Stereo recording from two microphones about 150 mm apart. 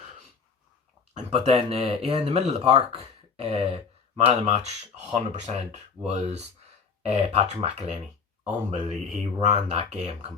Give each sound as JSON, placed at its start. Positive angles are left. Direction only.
{"t": 1.1, "sound": "speech", "side_deg": -40}